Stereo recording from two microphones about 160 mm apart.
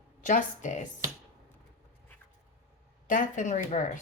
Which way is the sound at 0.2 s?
50° left (ahead or behind).